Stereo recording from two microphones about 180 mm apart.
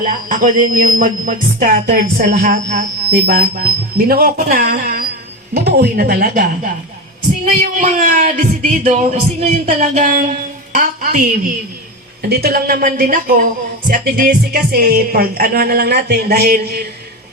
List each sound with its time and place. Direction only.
0.0 s speech: 50° right (ahead or behind)
3.1 s speech: 60° right (ahead or behind)
12.4 s speech: 60° right (ahead or behind)